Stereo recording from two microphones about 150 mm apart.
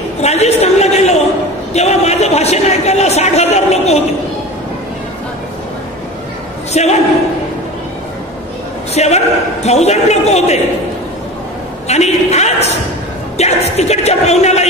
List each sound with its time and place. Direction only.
0.2 s a man's voice: 45° left (ahead or behind)
6.7 s a man's voice: 45° left (ahead or behind)
8.9 s a man's voice: 45° left (ahead or behind)
11.9 s a woman's voice: 45° left (ahead or behind)